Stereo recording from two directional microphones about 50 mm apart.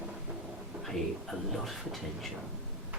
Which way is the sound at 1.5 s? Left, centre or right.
Centre.